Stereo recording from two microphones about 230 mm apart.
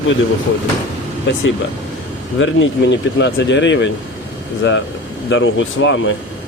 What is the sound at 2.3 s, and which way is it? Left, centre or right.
Speech, left.